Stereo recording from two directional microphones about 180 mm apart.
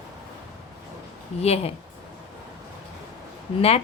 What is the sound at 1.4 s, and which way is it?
Speech, 35° left (ahead or behind).